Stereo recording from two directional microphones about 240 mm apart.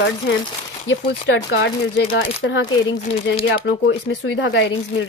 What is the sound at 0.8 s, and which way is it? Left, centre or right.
Speech, left.